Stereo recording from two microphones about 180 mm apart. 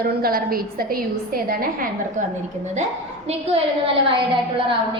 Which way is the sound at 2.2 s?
45° right (ahead or behind).